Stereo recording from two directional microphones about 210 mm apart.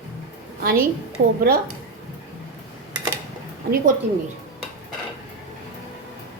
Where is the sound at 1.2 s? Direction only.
55° right (ahead or behind).